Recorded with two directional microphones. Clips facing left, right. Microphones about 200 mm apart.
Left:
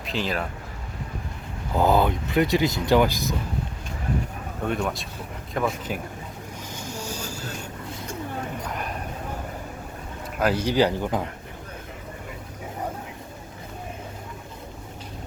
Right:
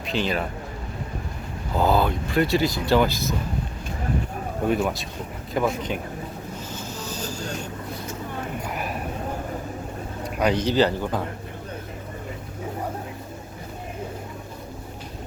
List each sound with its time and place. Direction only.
0.0 s speech: centre (ahead or behind)
1.7 s speech: 15° left (ahead or behind)
4.6 s speech: 5° right (ahead or behind)
6.7 s train: 10° left (ahead or behind)
8.6 s a sound: 5° right (ahead or behind)
10.3 s speech: 5° left (ahead or behind)